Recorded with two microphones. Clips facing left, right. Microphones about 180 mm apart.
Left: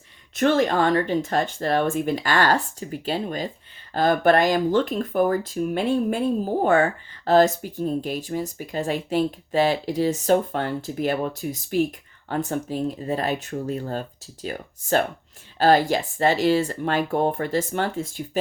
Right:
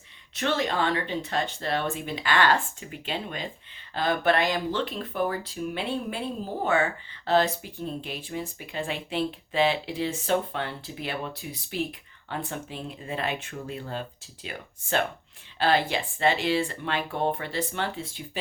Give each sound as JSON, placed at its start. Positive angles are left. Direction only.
{"t": 0.3, "sound": "speech", "side_deg": 50}